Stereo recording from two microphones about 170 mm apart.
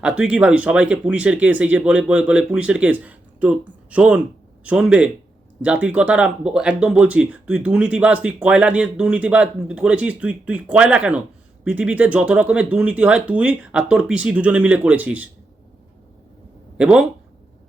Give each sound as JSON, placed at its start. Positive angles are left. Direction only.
{"t": 0.0, "sound": "speech", "side_deg": -5}
{"t": 16.7, "sound": "speech", "side_deg": -5}